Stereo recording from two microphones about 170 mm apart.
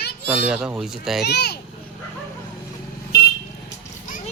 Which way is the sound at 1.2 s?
75° left (ahead or behind).